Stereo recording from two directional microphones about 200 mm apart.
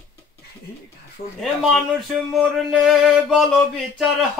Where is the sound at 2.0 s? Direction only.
Centre (ahead or behind).